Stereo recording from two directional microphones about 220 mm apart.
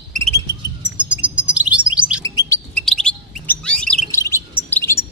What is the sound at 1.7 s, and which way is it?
Chirp, 35° right (ahead or behind).